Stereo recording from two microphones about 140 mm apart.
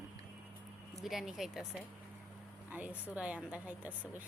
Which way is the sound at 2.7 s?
10° right (ahead or behind).